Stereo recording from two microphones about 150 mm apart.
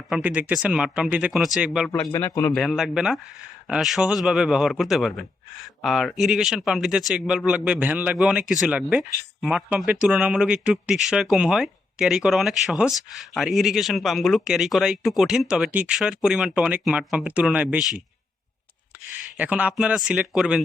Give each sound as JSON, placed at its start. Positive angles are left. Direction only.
{"t": 0.1, "sound": "speech", "side_deg": -10}
{"t": 1.9, "sound": "a man's voice", "side_deg": 20}
{"t": 2.6, "sound": "speech", "side_deg": 0}
{"t": 19.4, "sound": "speech", "side_deg": -10}